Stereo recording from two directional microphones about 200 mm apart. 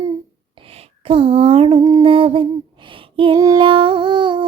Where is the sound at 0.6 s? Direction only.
30° right (ahead or behind).